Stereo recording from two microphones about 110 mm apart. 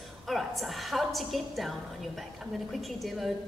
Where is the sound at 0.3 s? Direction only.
Centre (ahead or behind).